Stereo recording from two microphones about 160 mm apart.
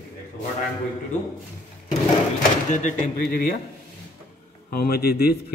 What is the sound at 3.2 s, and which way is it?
Speech, 70° left (ahead or behind).